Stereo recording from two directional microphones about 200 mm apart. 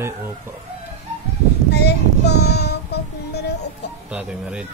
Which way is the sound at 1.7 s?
55° left (ahead or behind).